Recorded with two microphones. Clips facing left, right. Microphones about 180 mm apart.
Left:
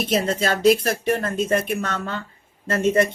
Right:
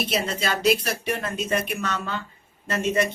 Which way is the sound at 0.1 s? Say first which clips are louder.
Left 5 dB; 50° left (ahead or behind).